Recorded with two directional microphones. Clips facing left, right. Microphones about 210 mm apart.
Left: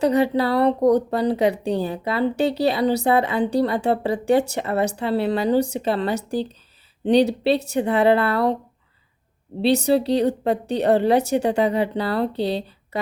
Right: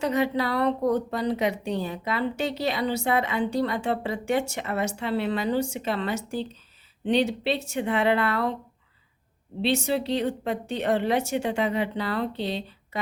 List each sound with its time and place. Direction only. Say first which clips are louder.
0.0 s speech: left 6 dB; 35° left (ahead or behind)
9.6 s speech: left 7 dB; 35° left (ahead or behind)